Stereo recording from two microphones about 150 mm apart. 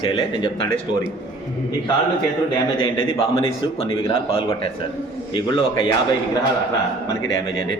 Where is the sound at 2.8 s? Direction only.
35° left (ahead or behind).